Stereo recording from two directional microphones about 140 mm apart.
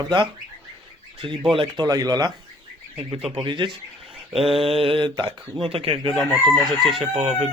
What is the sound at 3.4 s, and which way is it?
Mantra, 35° right (ahead or behind).